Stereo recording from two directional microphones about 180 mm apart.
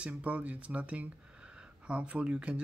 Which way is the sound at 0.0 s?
10° right (ahead or behind).